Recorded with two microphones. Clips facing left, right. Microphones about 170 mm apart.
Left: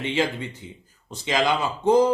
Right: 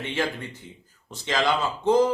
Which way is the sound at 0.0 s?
15° left (ahead or behind).